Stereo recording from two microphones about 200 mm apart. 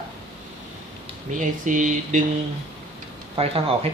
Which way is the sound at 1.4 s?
40° right (ahead or behind).